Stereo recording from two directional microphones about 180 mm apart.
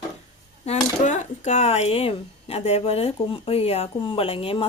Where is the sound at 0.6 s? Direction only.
40° left (ahead or behind).